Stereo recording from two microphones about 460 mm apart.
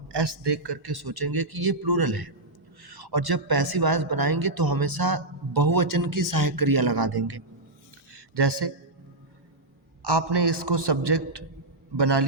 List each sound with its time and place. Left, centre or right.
0.1 s speech: right
8.1 s a sound: right
10.0 s a man's voice: right